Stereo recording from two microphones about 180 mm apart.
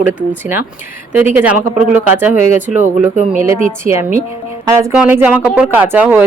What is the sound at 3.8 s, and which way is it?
Speech, 50° right (ahead or behind).